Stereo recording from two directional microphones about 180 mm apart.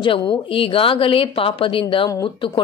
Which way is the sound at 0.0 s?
30° left (ahead or behind).